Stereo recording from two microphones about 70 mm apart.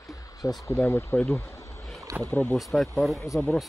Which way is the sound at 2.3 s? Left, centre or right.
Left.